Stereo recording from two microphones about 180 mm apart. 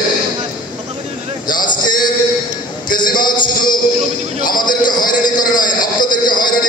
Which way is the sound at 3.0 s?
25° left (ahead or behind).